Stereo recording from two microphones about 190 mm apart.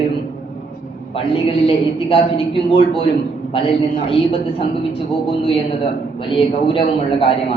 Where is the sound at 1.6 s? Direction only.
30° left (ahead or behind).